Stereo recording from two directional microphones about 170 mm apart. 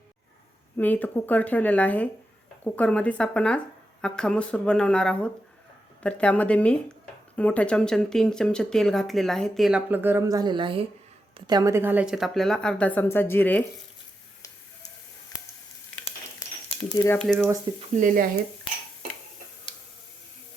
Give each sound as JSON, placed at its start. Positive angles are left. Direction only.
{"t": 0.8, "sound": "speech", "side_deg": 10}
{"t": 17.2, "sound": "speech", "side_deg": 0}
{"t": 17.7, "sound": "speech", "side_deg": -50}